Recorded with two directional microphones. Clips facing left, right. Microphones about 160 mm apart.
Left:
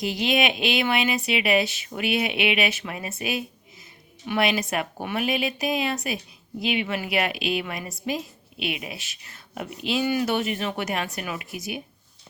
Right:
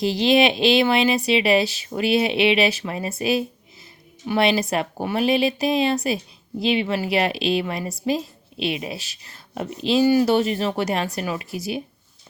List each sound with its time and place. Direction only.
0.0 s a woman's voice: 30° right (ahead or behind)